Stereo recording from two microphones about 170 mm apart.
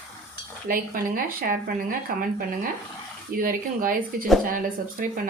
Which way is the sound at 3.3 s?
55° right (ahead or behind).